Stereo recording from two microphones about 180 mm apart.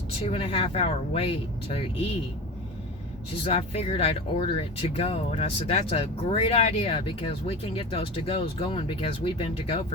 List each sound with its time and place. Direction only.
0.3 s speech: 30° left (ahead or behind)
3.4 s speech: 35° left (ahead or behind)